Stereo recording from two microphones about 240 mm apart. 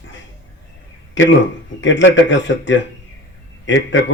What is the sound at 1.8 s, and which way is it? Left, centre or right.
A man's voice, left.